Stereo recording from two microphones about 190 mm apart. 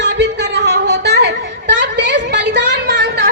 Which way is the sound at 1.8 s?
65° right (ahead or behind).